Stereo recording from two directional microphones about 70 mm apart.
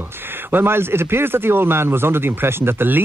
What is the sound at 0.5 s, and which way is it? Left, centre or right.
Speech, right.